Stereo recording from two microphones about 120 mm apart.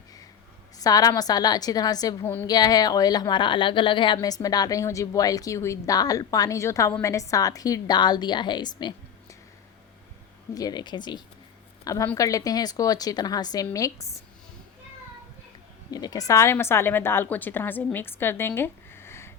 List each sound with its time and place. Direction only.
0.8 s speech: 30° left (ahead or behind)
2.2 s a woman's voice: 15° left (ahead or behind)
2.5 s speech: 35° left (ahead or behind)
10.5 s a woman's voice: 35° left (ahead or behind)
15.9 s a woman's voice: 30° left (ahead or behind)